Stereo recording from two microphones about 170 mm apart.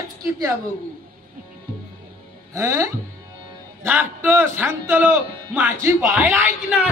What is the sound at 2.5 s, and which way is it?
A man's voice, 20° right (ahead or behind).